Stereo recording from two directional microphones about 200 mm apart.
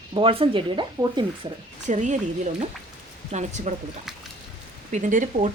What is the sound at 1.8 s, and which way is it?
Speech, 35° right (ahead or behind).